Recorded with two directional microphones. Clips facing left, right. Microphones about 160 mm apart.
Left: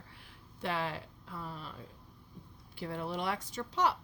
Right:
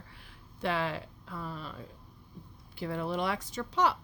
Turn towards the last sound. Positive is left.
turn(degrees=-90)